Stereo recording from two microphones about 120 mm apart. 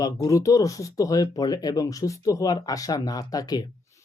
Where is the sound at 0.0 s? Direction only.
25° left (ahead or behind).